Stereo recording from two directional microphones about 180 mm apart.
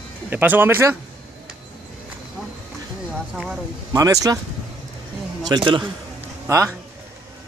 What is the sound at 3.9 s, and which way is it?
Speech, 20° right (ahead or behind).